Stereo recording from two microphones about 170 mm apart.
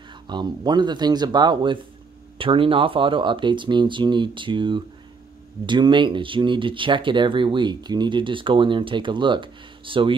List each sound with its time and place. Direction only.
0.3 s speech: 25° right (ahead or behind)